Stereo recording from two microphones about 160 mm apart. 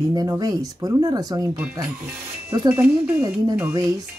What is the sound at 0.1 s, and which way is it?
Speech, 25° right (ahead or behind).